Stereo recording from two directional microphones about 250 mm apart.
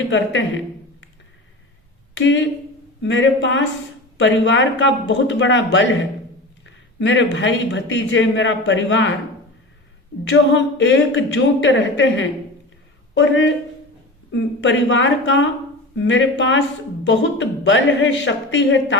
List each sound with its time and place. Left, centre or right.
0.1 s speech: left
2.1 s speech: left
7.0 s speech: left
10.2 s speech: left